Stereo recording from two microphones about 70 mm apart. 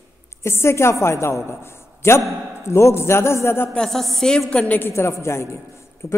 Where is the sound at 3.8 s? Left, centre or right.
Centre.